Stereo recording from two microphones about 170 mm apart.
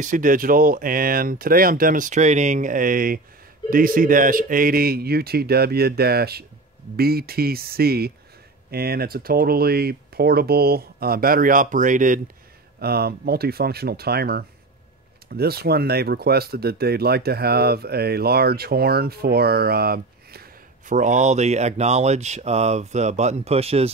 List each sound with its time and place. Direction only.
0.0 s speech: 50° right (ahead or behind)
12.8 s speech: 65° right (ahead or behind); by 23.9 s 35° right (ahead or behind)